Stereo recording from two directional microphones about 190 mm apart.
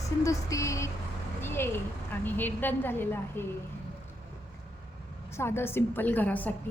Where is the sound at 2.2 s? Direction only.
10° left (ahead or behind).